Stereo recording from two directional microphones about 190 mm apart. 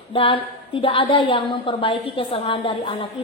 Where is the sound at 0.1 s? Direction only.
25° left (ahead or behind).